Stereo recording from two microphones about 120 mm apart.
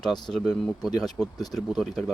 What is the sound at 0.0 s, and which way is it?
Speech, 5° left (ahead or behind).